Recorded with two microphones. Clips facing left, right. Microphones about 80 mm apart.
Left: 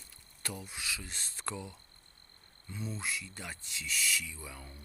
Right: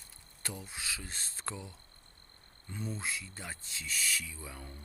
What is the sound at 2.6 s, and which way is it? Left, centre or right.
Speech, right.